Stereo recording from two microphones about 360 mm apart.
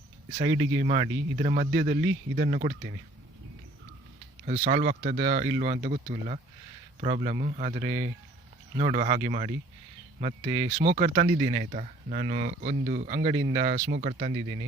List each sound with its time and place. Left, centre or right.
0.3 s speech: centre
4.4 s speech: centre